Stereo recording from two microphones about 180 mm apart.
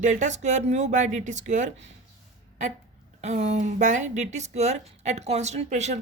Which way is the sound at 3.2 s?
40° right (ahead or behind).